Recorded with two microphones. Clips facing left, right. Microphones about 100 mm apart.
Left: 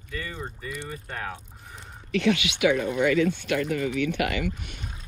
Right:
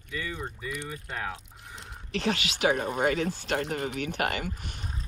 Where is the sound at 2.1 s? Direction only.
35° right (ahead or behind).